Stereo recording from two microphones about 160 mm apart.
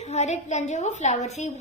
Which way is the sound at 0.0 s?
45° left (ahead or behind).